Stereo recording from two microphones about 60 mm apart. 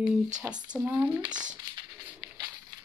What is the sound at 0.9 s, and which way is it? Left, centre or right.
Speech, right.